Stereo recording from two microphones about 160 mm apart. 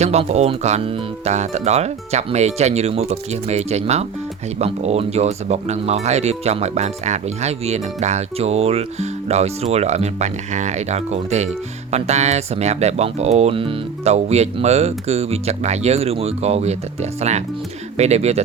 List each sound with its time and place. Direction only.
0.0 s speech: 45° right (ahead or behind)